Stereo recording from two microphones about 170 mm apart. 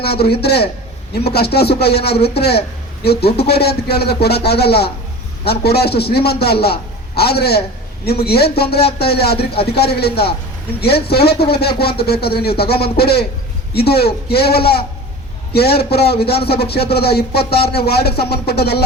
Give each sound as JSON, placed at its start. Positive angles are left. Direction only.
{"t": 0.0, "sound": "a man's voice", "side_deg": 70}